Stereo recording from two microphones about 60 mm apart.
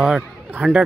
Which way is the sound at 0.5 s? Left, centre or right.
Right.